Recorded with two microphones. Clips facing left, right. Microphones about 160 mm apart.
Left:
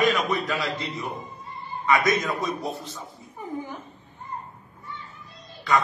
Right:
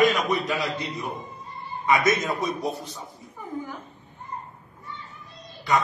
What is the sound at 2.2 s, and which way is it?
Speech, 20° right (ahead or behind).